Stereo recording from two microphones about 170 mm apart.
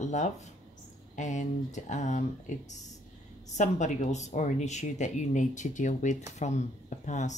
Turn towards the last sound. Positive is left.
turn(degrees=45)  # may be behind; listen again after turning